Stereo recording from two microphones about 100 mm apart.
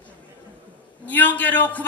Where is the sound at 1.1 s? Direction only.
15° left (ahead or behind).